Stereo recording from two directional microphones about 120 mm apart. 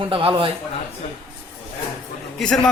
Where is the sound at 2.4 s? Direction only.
5° left (ahead or behind).